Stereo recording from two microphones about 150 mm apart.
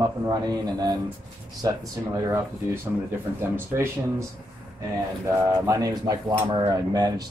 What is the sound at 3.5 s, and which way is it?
Speech, 15° right (ahead or behind).